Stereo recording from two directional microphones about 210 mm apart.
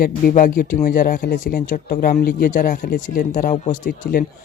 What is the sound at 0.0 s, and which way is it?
Speech, 40° left (ahead or behind).